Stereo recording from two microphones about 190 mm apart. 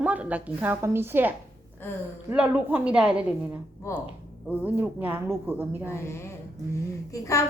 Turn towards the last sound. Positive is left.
turn(degrees=15)  # may be behind; listen again after turning